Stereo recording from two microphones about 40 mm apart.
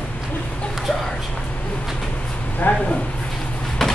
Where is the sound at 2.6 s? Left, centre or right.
Left.